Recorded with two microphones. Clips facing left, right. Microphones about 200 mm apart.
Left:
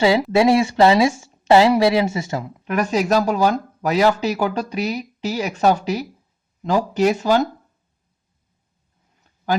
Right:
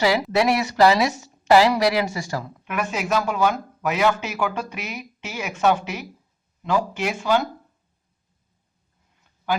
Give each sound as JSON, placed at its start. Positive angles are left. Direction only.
{"t": 0.0, "sound": "a woman's voice", "side_deg": 25}
{"t": 2.6, "sound": "speech", "side_deg": 40}